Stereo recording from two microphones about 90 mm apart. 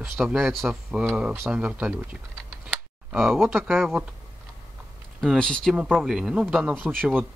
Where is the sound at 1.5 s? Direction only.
15° right (ahead or behind).